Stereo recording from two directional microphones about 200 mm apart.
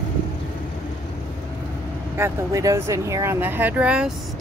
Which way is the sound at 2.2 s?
15° right (ahead or behind).